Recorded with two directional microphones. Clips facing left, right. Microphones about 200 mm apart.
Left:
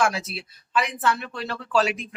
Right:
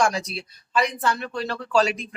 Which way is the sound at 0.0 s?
5° left (ahead or behind).